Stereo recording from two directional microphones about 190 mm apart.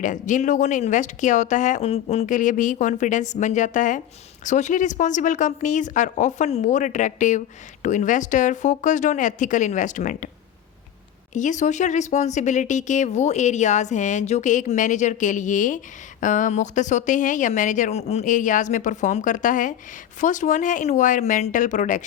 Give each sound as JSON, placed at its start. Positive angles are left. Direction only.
{"t": 0.0, "sound": "a woman's voice", "side_deg": 40}
{"t": 11.3, "sound": "a woman's voice", "side_deg": 40}